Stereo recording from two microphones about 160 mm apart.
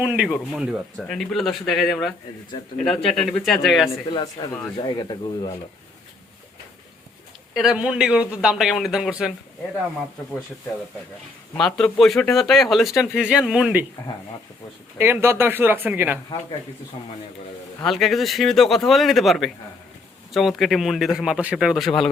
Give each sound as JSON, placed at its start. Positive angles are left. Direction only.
{"t": 0.0, "sound": "speech", "side_deg": -5}
{"t": 4.1, "sound": "speech", "side_deg": 25}
{"t": 7.5, "sound": "speech", "side_deg": -5}
{"t": 11.5, "sound": "speech", "side_deg": 5}
{"t": 14.9, "sound": "speech", "side_deg": -15}
{"t": 17.8, "sound": "speech", "side_deg": 0}